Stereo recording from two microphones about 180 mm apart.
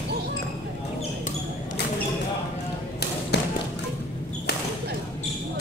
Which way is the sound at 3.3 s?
65° left (ahead or behind).